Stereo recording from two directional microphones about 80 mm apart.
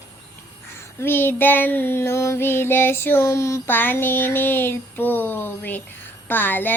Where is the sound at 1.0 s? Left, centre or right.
Left.